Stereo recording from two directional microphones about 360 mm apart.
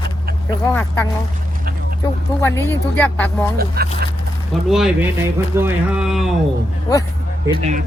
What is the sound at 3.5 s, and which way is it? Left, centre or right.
Speech, right.